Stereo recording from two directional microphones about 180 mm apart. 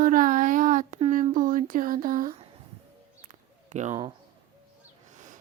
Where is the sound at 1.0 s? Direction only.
35° right (ahead or behind).